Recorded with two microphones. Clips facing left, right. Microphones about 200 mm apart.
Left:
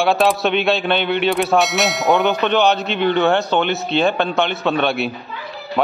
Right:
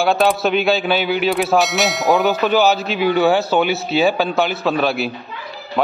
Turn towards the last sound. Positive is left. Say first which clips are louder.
# left 1 dB
turn(degrees=0)  # may be behind; listen again after turning